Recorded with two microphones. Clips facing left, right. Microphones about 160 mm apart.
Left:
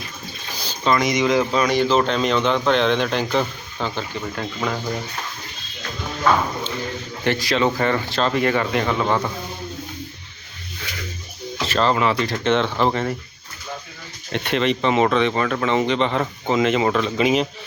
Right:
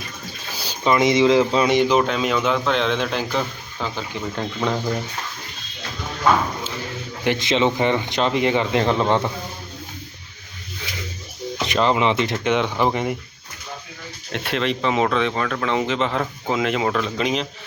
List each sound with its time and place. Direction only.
0.5 s a sound: 10° right (ahead or behind)
1.0 s speech: 25° right (ahead or behind); by 4.0 s centre (ahead or behind)
4.4 s speech: 25° right (ahead or behind)
7.3 s speech: 20° right (ahead or behind)
11.5 s speech: 15° right (ahead or behind)
12.4 s speech: 10° right (ahead or behind)
14.3 s speech: centre (ahead or behind)